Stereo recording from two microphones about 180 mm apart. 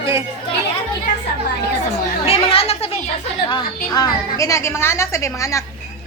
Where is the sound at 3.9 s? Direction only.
20° left (ahead or behind).